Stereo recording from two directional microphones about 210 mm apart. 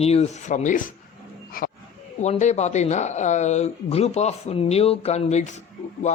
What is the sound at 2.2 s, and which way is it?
A man's voice, 35° left (ahead or behind).